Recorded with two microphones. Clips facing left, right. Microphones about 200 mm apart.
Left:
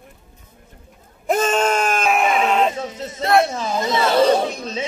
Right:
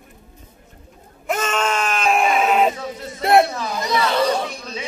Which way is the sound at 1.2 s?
40° left (ahead or behind).